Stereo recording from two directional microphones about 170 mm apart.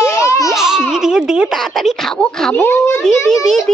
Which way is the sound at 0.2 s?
20° left (ahead or behind).